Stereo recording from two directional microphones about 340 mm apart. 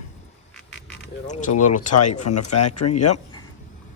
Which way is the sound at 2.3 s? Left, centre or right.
Left.